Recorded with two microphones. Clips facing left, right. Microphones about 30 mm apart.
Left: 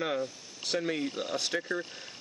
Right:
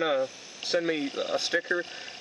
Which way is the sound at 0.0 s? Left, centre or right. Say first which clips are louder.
Right 5 dB; centre.